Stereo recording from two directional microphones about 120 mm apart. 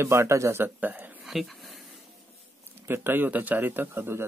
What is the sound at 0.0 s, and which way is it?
Speech, 25° right (ahead or behind).